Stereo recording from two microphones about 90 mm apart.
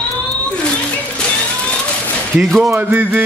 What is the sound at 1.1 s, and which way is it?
Music, 10° left (ahead or behind).